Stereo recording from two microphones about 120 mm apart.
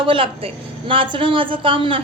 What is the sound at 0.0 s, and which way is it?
A woman's voice, 45° right (ahead or behind).